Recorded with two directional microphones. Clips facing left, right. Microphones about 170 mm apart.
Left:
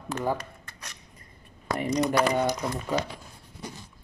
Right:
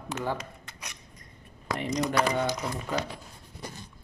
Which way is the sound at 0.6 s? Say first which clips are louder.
Right 1 dB; 15° right (ahead or behind).